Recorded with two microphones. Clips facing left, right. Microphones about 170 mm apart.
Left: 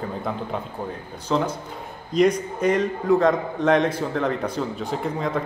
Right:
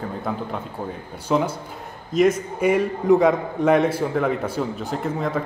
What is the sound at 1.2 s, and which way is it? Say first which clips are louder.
A man's voice: right 2 dB; 10° right (ahead or behind).